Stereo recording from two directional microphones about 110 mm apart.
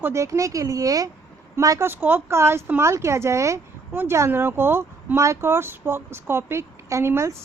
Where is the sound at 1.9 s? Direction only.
20° right (ahead or behind).